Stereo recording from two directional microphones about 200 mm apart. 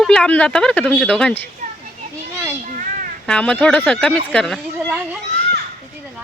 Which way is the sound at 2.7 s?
40° right (ahead or behind).